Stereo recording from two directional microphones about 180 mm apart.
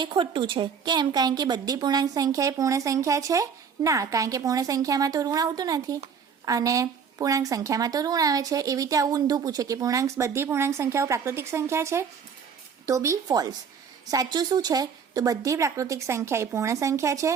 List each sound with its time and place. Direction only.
0.0 s a woman's voice: 25° right (ahead or behind)